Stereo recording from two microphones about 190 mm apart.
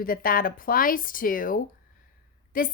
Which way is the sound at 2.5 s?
50° left (ahead or behind).